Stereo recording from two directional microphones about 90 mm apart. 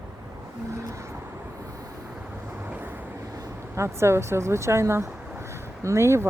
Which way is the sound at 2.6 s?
20° right (ahead or behind).